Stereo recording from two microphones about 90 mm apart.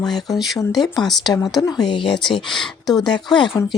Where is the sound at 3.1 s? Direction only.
60° left (ahead or behind).